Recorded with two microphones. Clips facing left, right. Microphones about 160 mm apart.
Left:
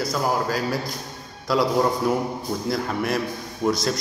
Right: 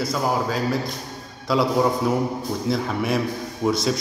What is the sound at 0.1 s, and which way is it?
A man's voice, centre (ahead or behind).